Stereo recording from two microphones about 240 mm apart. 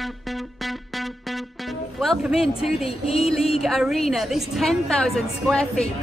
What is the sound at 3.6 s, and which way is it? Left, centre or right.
A woman's voice, centre.